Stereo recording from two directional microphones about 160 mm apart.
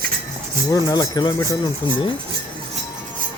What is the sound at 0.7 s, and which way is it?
Speech, 25° left (ahead or behind).